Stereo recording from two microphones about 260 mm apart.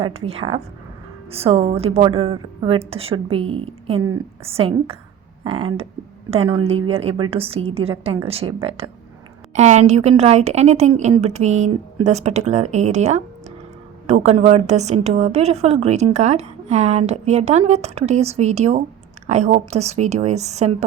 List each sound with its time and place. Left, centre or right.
0.0 s speech: right